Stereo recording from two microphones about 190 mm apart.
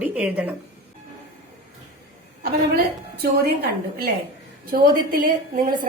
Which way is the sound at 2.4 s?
55° right (ahead or behind).